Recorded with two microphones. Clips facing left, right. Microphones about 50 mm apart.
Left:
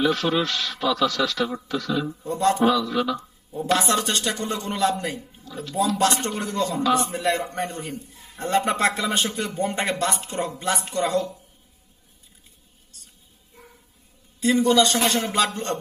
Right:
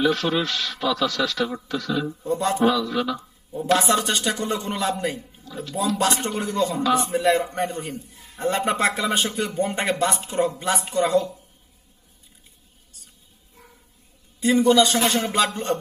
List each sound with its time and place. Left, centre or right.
0.0 s speech: centre
14.4 s speech: centre
15.2 s music: right
15.4 s speech: centre